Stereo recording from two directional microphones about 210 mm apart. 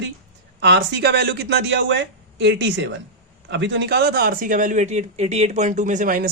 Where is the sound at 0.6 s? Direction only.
55° right (ahead or behind).